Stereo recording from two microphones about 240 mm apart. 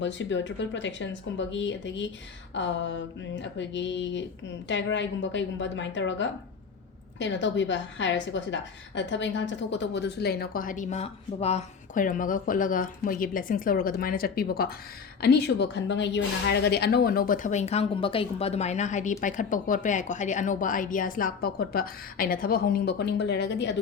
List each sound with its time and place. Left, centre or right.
0.0 s a woman's voice: left